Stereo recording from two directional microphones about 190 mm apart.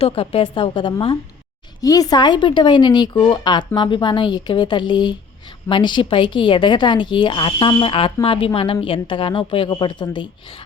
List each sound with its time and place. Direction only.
0.0 s a woman's voice: 30° left (ahead or behind)